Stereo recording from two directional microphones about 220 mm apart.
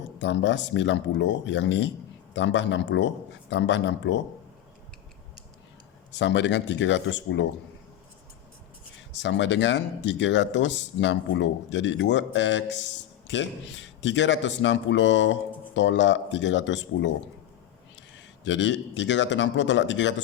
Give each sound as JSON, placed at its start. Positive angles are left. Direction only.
{"t": 0.2, "sound": "speech", "side_deg": 55}
{"t": 6.1, "sound": "speech", "side_deg": 55}
{"t": 9.1, "sound": "speech", "side_deg": 55}
{"t": 18.4, "sound": "speech", "side_deg": 55}